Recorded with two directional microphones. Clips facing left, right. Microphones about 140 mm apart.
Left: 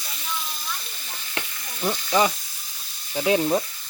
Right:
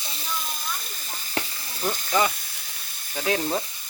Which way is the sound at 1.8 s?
20° left (ahead or behind).